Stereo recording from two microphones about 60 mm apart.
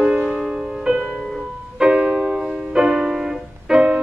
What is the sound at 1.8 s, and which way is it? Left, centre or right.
Music, centre.